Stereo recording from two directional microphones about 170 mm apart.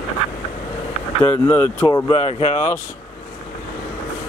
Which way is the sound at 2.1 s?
35° left (ahead or behind).